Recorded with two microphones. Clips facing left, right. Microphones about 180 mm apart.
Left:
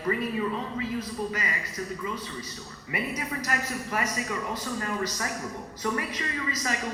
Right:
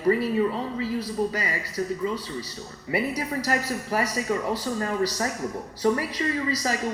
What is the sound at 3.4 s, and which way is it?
A woman's voice, 35° right (ahead or behind).